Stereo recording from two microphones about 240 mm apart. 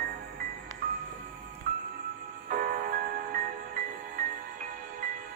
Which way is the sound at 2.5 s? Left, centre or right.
Right.